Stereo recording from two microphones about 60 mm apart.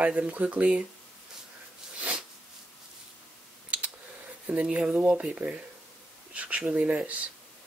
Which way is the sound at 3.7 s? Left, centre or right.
Right.